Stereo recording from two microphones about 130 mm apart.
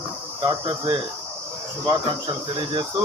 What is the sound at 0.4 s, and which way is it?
Cricket, 30° right (ahead or behind).